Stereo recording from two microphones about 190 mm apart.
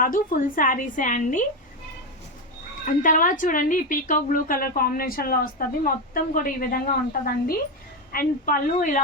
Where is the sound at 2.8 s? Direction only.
45° left (ahead or behind).